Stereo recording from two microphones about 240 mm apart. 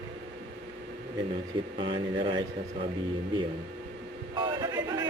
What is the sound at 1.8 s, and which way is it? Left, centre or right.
Speech, right.